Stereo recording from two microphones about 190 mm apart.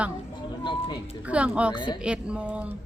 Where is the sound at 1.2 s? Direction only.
5° right (ahead or behind).